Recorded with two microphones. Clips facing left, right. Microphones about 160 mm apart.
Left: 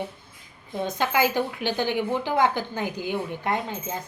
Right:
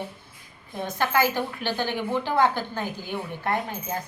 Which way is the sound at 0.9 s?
15° left (ahead or behind).